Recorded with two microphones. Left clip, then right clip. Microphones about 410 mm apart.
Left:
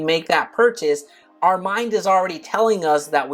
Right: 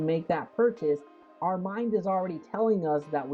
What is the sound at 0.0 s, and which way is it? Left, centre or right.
Speech, centre.